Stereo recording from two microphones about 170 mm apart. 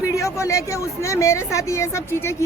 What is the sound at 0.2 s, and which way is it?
A man's voice, 20° left (ahead or behind).